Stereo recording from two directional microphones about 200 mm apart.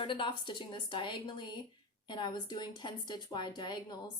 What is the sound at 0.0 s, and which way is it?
A woman's voice, 25° left (ahead or behind).